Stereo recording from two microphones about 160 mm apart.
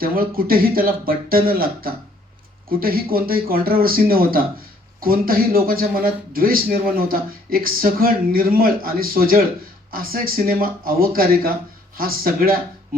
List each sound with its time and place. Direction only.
0.0 s speech: 65° right (ahead or behind)